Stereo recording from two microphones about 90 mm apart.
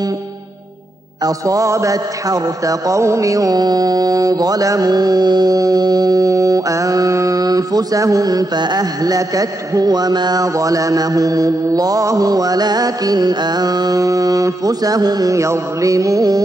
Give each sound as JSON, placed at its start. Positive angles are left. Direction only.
{"t": 1.2, "sound": "a man's voice", "side_deg": -40}